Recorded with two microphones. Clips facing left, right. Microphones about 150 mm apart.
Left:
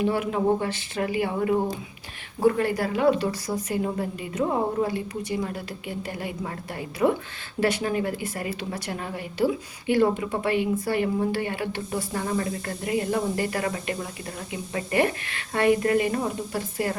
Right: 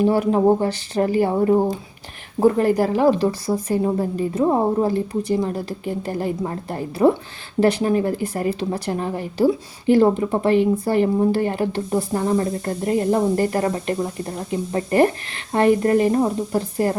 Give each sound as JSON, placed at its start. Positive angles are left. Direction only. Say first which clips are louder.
{"t": 0.0, "sound": "speech", "louder": "right 7 dB", "side_deg": -40}
{"t": 3.2, "sound": "speech", "louder": "right 7 dB", "side_deg": -30}